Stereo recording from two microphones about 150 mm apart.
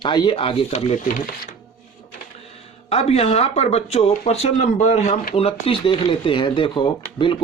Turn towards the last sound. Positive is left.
turn(degrees=35)  # may be behind; listen again after turning